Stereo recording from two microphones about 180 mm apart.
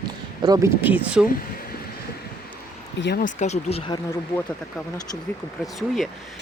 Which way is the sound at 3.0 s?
70° left (ahead or behind).